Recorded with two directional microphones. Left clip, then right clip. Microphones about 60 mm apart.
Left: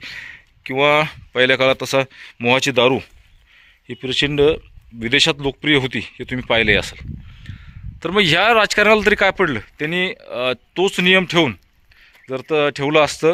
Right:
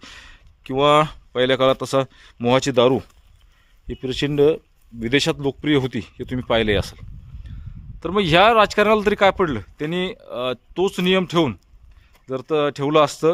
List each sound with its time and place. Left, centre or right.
0.9 s speech: right
1.3 s speech: right
1.8 s speech: right
3.9 s speech: right
4.3 s speech: right
7.9 s speech: centre
8.9 s speech: centre
9.3 s speech: right
10.3 s speech: centre
12.2 s speech: right